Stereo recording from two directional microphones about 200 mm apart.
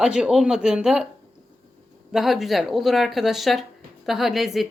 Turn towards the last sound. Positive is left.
turn(degrees=0)  # may be behind; listen again after turning